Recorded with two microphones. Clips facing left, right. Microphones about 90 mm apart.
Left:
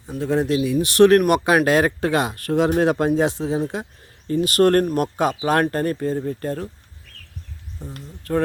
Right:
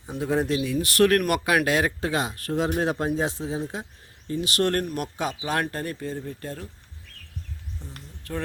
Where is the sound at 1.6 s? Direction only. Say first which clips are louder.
Left 6 dB; 45° left (ahead or behind); by 3.8 s 65° left (ahead or behind).